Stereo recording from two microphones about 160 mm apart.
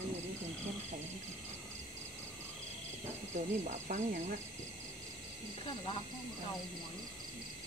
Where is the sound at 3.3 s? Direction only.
50° right (ahead or behind).